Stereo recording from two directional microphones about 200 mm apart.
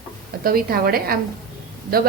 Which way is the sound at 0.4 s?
50° right (ahead or behind).